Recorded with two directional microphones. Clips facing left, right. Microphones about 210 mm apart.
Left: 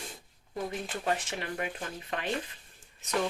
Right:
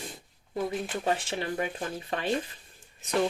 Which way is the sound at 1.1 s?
30° right (ahead or behind).